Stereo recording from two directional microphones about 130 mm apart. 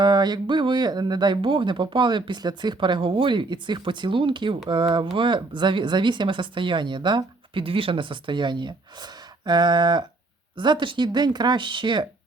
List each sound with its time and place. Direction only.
0.0 s speech: 35° right (ahead or behind)